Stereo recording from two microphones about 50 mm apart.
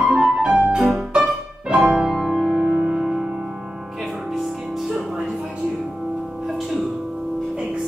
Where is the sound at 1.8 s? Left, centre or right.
Right.